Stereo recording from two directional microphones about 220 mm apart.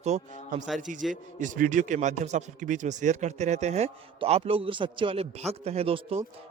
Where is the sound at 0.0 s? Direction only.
30° right (ahead or behind).